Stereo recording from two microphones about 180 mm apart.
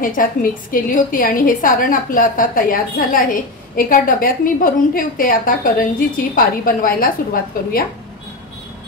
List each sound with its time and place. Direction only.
0.0 s a woman's voice: 50° left (ahead or behind)